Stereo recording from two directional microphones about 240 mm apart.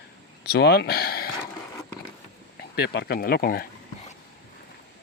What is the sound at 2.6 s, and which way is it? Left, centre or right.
Speech, left.